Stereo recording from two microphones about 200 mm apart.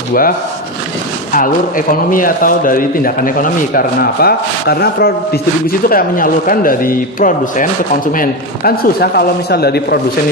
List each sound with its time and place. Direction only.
0.1 s speech: 45° left (ahead or behind)